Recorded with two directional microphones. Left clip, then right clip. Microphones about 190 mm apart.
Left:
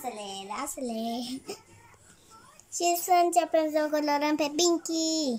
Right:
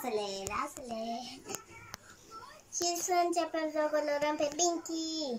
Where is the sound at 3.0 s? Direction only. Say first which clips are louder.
Left 7 dB; 50° left (ahead or behind).